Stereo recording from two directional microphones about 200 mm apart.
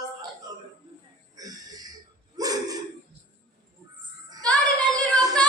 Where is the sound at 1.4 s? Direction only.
20° right (ahead or behind).